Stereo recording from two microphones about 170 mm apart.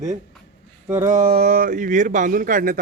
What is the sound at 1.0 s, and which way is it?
Speech, 50° right (ahead or behind).